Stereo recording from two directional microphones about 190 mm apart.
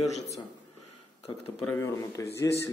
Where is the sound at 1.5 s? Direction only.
10° left (ahead or behind).